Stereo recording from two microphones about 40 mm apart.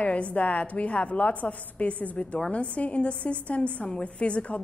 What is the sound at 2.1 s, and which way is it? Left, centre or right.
A woman's voice, left.